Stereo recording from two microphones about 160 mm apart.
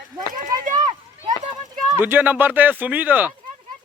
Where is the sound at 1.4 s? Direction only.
30° right (ahead or behind).